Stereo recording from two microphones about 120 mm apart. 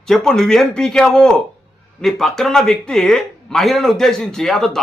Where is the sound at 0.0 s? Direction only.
5° left (ahead or behind).